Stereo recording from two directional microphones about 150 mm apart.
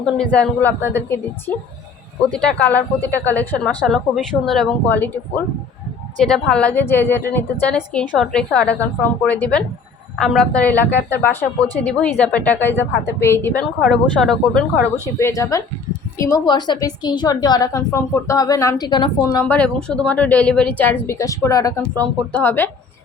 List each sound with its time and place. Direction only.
0.0 s a woman's voice: 5° left (ahead or behind)
13.8 s speech: centre (ahead or behind)
15.2 s a woman's voice: 20° left (ahead or behind)
19.5 s a woman's voice: 10° left (ahead or behind)